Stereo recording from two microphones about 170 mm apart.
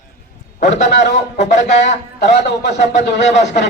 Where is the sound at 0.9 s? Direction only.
90° left.